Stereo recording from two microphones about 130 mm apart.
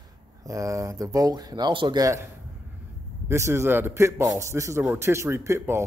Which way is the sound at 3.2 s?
20° right (ahead or behind).